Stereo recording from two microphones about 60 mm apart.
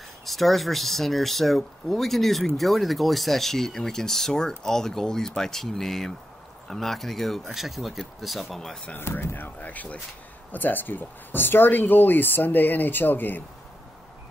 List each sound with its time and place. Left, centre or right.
0.2 s speech: centre
8.9 s speech: left
9.6 s speech: left